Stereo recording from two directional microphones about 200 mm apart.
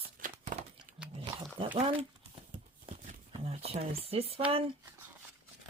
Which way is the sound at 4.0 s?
30° right (ahead or behind).